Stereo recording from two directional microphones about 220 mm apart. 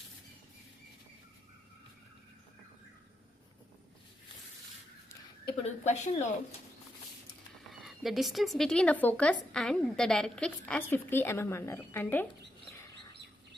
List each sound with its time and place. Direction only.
5.6 s speech: 30° left (ahead or behind)
7.7 s speech: centre (ahead or behind)